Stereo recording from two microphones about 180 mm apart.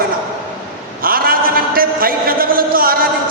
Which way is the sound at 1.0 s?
55° right (ahead or behind).